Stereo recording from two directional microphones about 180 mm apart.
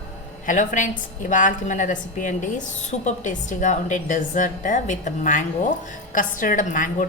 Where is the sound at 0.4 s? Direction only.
45° left (ahead or behind).